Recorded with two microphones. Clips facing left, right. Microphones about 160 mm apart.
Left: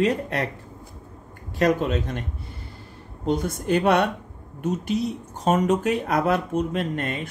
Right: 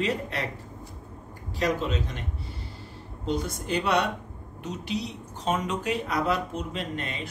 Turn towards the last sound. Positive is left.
turn(degrees=50)  # may be behind; listen again after turning